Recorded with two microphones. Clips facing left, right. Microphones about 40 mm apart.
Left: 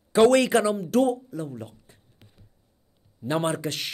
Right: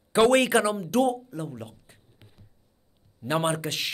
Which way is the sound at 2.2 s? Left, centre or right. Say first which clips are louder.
Even; centre.